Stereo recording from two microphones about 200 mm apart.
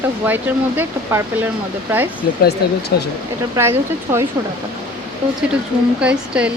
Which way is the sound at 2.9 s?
50° left (ahead or behind).